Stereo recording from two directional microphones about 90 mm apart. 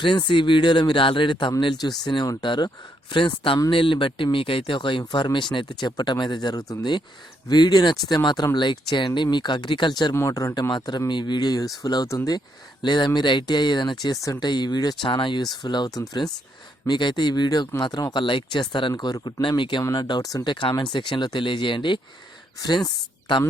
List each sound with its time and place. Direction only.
0.0 s speech: 65° left (ahead or behind)
1.6 s speech: 50° left (ahead or behind)
10.2 s speech: 35° left (ahead or behind)
10.5 s speech: 50° left (ahead or behind)
12.0 s speech: 40° left (ahead or behind)
12.8 s speech: 55° left (ahead or behind)
14.0 s speech: 40° left (ahead or behind)
14.3 s speech: 55° left (ahead or behind)
15.0 s speech: 65° left (ahead or behind); by 16.3 s 50° left (ahead or behind)
16.8 s speech: 60° left (ahead or behind)
18.1 s speech: 65° left (ahead or behind)
20.0 s speech: 55° left (ahead or behind)
20.4 s speech: 65° left (ahead or behind)